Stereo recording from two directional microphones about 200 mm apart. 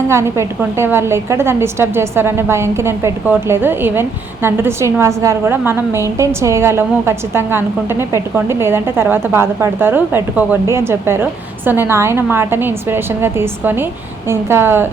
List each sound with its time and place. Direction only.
0.1 s a woman's voice: 15° right (ahead or behind)